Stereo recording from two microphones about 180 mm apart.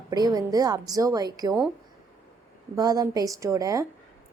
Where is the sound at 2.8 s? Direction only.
20° right (ahead or behind).